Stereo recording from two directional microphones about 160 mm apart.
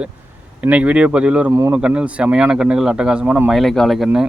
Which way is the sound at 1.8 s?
10° right (ahead or behind).